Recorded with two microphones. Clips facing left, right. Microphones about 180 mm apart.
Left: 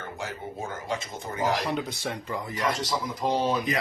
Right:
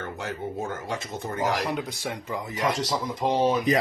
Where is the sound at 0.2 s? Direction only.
55° right (ahead or behind).